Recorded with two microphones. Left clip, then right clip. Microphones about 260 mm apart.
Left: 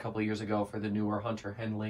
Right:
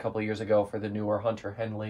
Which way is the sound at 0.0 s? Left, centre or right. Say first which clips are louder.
Right 4 dB; right.